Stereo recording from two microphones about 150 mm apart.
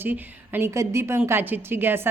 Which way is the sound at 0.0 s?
15° right (ahead or behind).